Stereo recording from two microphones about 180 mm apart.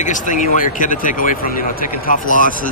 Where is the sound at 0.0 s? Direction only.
45° left (ahead or behind).